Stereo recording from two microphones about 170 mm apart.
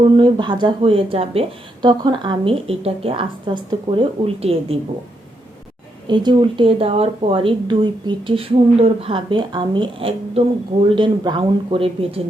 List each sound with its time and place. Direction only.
0.0 s speech: 30° right (ahead or behind)
6.1 s speech: 25° right (ahead or behind)